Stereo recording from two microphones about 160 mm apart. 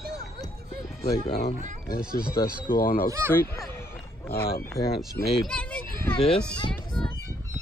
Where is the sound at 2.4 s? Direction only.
25° left (ahead or behind).